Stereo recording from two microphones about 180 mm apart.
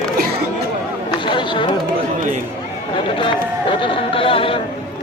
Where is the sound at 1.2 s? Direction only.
25° left (ahead or behind).